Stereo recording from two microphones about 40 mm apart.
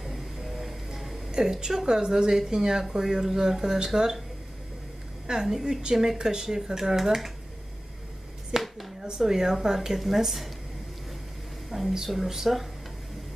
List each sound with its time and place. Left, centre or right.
0.0 s music: centre
1.4 s a woman's voice: centre
5.3 s speech: centre
8.5 s a sound: centre
9.0 s speech: centre
11.7 s speech: centre